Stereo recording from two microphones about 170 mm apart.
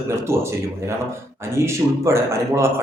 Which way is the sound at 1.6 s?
15° right (ahead or behind).